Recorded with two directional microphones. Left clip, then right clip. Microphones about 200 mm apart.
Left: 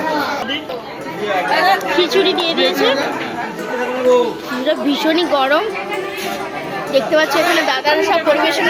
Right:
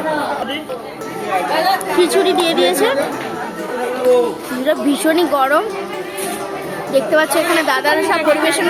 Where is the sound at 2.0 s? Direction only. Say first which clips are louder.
Right 1 dB; centre (ahead or behind).